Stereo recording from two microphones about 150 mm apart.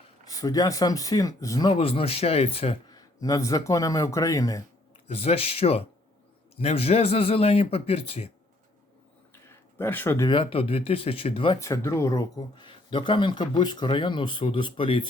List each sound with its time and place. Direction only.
0.3 s speech: 25° left (ahead or behind); by 2.7 s 40° left (ahead or behind)
2.9 s speech: 25° left (ahead or behind)
5.0 s speech: 40° left (ahead or behind)
9.3 s a sound: 15° left (ahead or behind)
10.2 s speech: 35° left (ahead or behind)
11.6 s speech: 20° left (ahead or behind)